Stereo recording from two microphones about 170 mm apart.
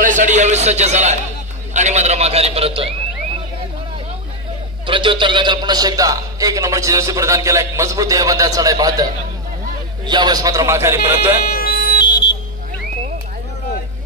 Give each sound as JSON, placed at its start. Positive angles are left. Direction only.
{"t": 0.0, "sound": "a man's voice", "side_deg": -50}
{"t": 4.8, "sound": "a man's voice", "side_deg": -30}
{"t": 11.5, "sound": "music", "side_deg": 60}